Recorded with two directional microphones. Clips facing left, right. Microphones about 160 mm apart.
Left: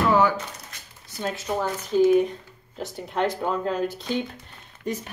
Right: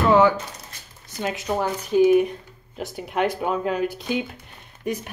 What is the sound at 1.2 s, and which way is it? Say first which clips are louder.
Speech: right 2 dB; 15° right (ahead or behind).